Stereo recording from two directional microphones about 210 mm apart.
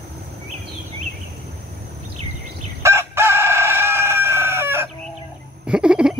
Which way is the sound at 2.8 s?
10° right (ahead or behind).